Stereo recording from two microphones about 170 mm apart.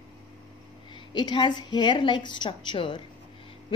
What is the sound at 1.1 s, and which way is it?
A woman's voice, 25° left (ahead or behind).